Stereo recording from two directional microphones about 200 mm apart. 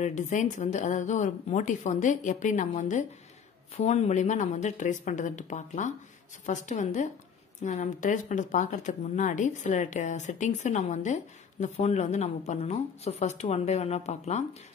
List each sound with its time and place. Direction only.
0.0 s speech: 40° left (ahead or behind)